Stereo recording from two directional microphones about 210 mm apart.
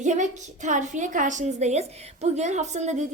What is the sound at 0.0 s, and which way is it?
A woman's voice, 35° right (ahead or behind).